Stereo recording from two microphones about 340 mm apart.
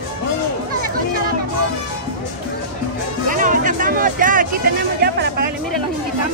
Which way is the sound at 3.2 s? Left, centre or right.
Right.